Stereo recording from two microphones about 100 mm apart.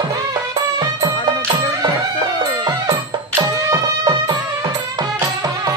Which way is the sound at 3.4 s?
35° right (ahead or behind).